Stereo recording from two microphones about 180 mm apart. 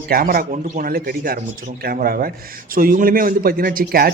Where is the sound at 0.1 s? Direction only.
55° right (ahead or behind).